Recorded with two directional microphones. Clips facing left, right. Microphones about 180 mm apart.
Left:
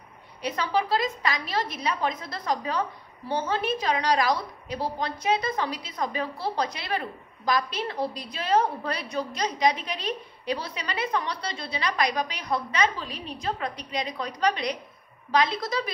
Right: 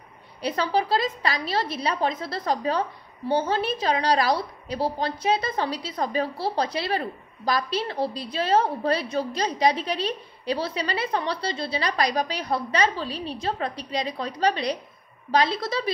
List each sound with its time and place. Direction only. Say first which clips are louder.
0.4 s a woman's voice: right 2 dB; 30° right (ahead or behind)